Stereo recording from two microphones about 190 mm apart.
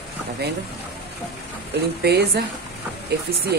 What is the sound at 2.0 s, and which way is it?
Speech, 60° right (ahead or behind).